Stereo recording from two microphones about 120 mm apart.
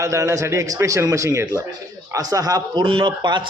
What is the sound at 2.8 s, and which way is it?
Speech, 40° right (ahead or behind).